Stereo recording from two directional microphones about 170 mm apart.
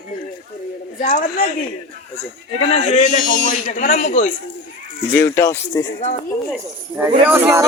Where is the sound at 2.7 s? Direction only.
40° left (ahead or behind).